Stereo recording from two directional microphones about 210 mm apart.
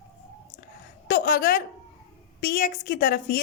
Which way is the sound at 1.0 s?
40° left (ahead or behind).